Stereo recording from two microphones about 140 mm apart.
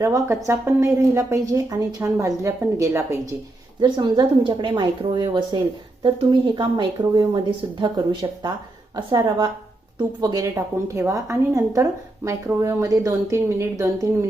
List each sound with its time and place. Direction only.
0.0 s a woman's voice: 20° right (ahead or behind)
3.8 s a woman's voice: 35° right (ahead or behind)